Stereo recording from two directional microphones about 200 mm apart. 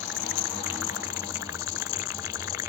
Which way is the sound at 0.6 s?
15° right (ahead or behind).